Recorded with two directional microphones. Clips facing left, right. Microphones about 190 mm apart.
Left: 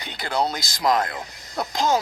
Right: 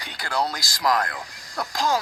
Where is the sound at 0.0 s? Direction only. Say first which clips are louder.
Left 2 dB; 20° left (ahead or behind).